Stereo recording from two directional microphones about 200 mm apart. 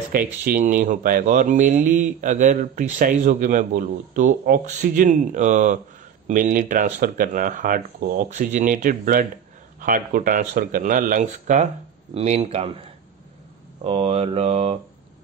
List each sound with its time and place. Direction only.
0.1 s speech: 45° right (ahead or behind)
13.8 s speech: 30° right (ahead or behind)